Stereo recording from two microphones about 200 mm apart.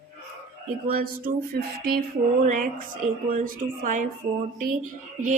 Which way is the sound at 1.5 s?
50° right (ahead or behind).